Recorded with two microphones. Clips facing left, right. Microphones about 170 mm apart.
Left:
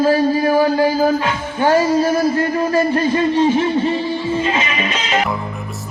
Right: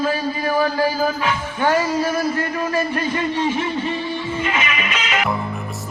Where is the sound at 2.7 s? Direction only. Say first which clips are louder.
Left 6 dB; 30° left (ahead or behind).